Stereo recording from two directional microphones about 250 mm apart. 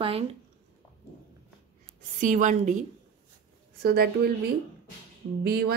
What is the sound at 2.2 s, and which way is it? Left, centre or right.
Speech, right.